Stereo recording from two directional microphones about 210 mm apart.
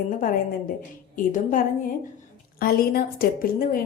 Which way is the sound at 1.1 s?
40° left (ahead or behind).